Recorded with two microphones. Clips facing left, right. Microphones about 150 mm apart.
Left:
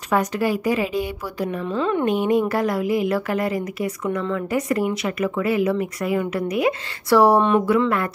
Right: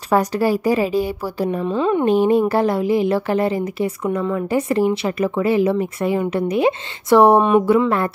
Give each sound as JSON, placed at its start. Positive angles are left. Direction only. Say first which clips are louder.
{"t": 0.1, "sound": "speech", "louder": "right 4 dB", "side_deg": -35}
{"t": 1.6, "sound": "speech", "louder": "right 3 dB", "side_deg": -20}
{"t": 2.0, "sound": "speech", "louder": "right 5 dB", "side_deg": -30}